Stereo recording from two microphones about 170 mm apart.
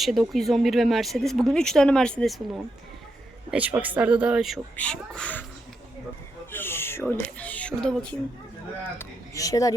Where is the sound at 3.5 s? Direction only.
10° right (ahead or behind); by 5.4 s 10° left (ahead or behind).